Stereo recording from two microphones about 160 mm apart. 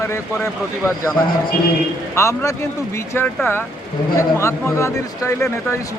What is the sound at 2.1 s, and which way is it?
Speech, 15° left (ahead or behind).